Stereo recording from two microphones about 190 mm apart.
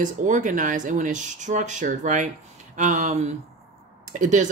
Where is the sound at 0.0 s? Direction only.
40° right (ahead or behind).